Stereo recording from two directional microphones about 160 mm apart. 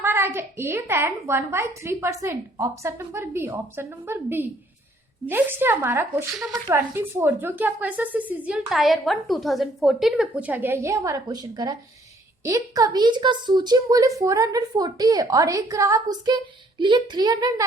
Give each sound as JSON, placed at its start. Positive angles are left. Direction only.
{"t": 0.0, "sound": "a woman's voice", "side_deg": -15}